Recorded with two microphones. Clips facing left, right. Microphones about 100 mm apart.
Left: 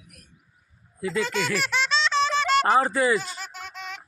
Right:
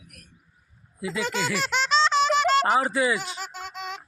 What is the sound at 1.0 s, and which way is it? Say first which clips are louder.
Speech: left 2 dB; 5° right (ahead or behind).